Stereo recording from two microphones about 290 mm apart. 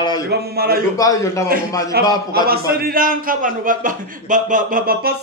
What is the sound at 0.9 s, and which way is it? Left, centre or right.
Speech, centre.